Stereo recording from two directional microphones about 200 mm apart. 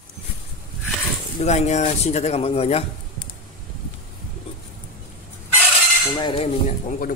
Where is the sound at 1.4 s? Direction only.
35° left (ahead or behind).